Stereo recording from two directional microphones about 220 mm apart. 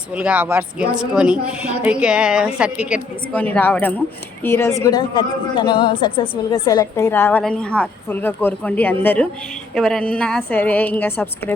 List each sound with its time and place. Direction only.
0.1 s a woman's voice: 5° right (ahead or behind)
3.3 s a woman's voice: 5° left (ahead or behind)